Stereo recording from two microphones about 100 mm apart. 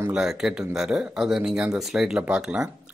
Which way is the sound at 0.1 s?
5° right (ahead or behind).